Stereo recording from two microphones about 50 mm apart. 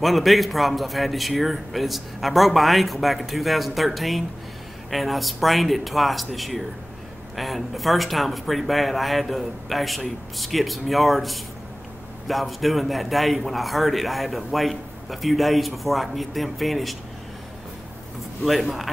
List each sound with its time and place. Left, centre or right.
0.0 s speech: centre
18.4 s speech: centre